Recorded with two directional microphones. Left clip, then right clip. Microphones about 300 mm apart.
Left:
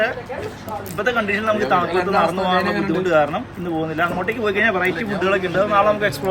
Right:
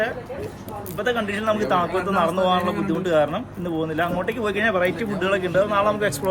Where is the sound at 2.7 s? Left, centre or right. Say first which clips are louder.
Left 4 dB; centre.